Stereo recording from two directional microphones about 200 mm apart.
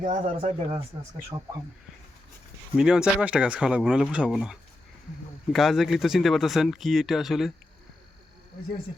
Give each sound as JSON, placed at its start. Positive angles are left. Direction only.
{"t": 0.0, "sound": "speech", "side_deg": -40}
{"t": 0.3, "sound": "speech", "side_deg": -30}
{"t": 2.7, "sound": "speech", "side_deg": -5}